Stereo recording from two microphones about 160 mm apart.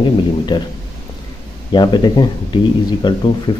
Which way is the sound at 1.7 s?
25° left (ahead or behind).